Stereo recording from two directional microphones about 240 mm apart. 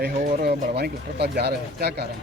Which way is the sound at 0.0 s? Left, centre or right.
Right.